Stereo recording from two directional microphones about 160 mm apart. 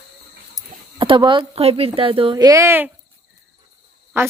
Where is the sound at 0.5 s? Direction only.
30° right (ahead or behind).